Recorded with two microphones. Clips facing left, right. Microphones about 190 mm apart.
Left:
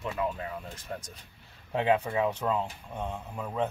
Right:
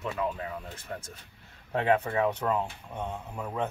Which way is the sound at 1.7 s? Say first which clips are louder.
Even; 15° left (ahead or behind).